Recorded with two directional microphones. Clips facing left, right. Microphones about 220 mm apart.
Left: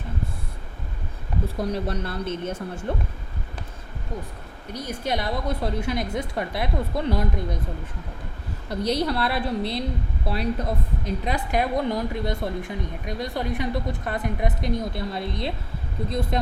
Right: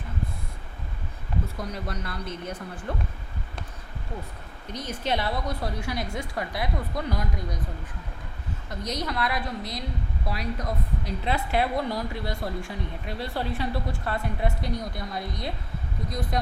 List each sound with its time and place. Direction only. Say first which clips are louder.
1.5 s a woman's voice: left 7 dB; 30° left (ahead or behind)
4.7 s a woman's voice: left 1 dB; 10° left (ahead or behind); by 7.6 s 25° left (ahead or behind)
8.7 s a woman's voice: left 7 dB; 30° left (ahead or behind)
11.3 s a woman's voice: left 1 dB; 15° left (ahead or behind)